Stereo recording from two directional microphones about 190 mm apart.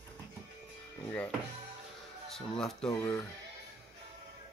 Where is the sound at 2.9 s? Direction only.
15° left (ahead or behind).